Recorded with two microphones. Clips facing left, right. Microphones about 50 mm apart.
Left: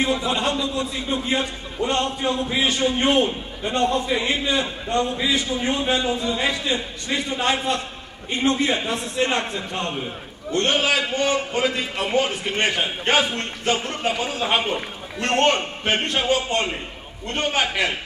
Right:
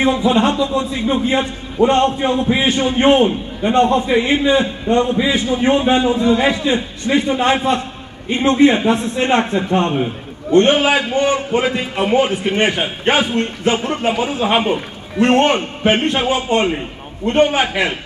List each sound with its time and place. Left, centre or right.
0.0 s a man's voice: right